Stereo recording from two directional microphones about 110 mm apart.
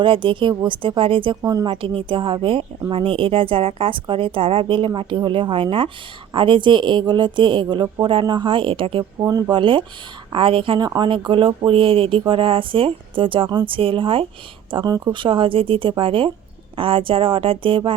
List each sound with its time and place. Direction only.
0.0 s speech: 50° right (ahead or behind)
1.4 s speech: 30° right (ahead or behind)
1.6 s a woman's voice: 55° right (ahead or behind)
9.2 s speech: 40° right (ahead or behind)
10.8 s speech: 40° right (ahead or behind)
14.7 s speech: 40° right (ahead or behind)